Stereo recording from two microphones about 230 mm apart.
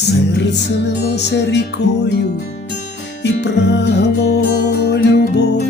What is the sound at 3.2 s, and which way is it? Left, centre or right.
Music, left.